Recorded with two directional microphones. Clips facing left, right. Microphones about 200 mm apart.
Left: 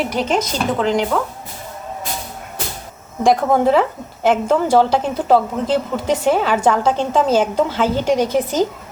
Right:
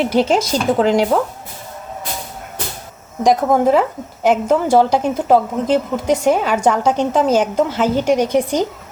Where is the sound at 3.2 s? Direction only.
10° right (ahead or behind).